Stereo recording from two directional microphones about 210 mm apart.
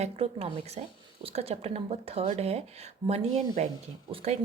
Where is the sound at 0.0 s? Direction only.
30° right (ahead or behind).